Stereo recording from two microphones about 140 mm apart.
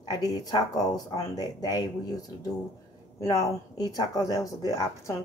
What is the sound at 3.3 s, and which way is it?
Speech, 25° left (ahead or behind).